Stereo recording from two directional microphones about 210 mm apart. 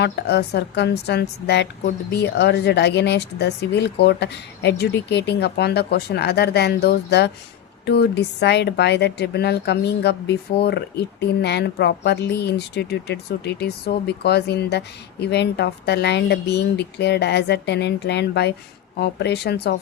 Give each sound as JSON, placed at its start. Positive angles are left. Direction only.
{"t": 0.0, "sound": "a woman's voice", "side_deg": 50}